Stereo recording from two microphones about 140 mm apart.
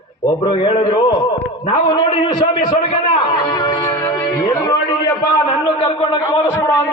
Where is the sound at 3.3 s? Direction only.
35° left (ahead or behind).